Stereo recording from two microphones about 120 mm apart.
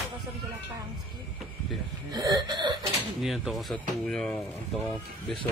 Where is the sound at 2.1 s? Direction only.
35° right (ahead or behind).